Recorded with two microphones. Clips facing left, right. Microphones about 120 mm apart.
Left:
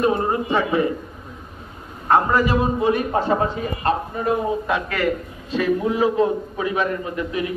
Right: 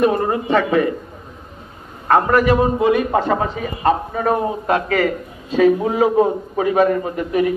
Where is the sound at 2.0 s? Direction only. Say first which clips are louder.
Right 3 dB; 70° right (ahead or behind).